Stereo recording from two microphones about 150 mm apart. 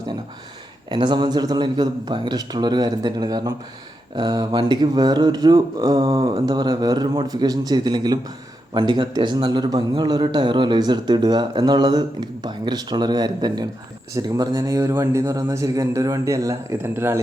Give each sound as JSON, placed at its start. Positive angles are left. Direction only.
{"t": 0.9, "sound": "a man's voice", "side_deg": -30}